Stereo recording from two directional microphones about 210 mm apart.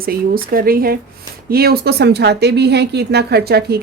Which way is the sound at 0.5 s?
45° right (ahead or behind).